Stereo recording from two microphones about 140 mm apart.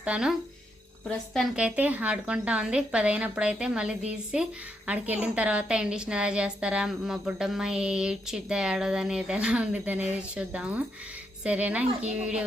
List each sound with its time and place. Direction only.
0.0 s a woman's voice: 5° right (ahead or behind)